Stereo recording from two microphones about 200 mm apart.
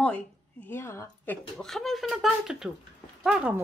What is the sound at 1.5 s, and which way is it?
Speech, centre (ahead or behind).